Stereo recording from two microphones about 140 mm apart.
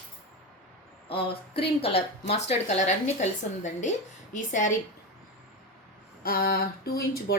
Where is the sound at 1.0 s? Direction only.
40° left (ahead or behind); by 4.7 s 65° left (ahead or behind).